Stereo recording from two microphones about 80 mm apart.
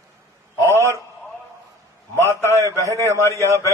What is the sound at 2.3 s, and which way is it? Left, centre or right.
A man's voice, left.